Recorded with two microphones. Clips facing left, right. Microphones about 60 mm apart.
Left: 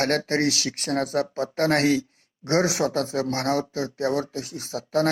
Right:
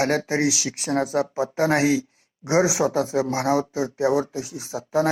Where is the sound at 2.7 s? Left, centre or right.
Left.